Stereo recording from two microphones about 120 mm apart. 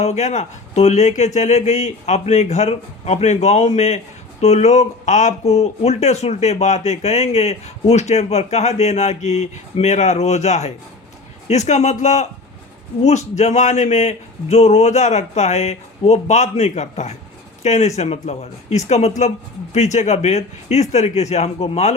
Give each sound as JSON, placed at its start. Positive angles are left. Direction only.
{"t": 0.0, "sound": "speech", "side_deg": 70}